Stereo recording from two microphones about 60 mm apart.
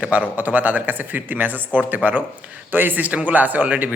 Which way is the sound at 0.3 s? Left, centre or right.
Right.